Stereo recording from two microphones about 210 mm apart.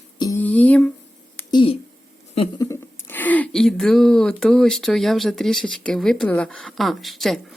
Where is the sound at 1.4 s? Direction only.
20° left (ahead or behind).